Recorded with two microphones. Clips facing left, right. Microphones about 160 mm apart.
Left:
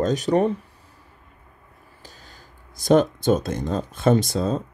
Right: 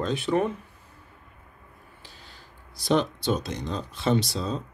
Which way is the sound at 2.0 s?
45° left (ahead or behind).